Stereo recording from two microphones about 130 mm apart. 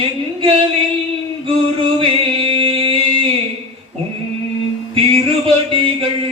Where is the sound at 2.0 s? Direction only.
45° right (ahead or behind).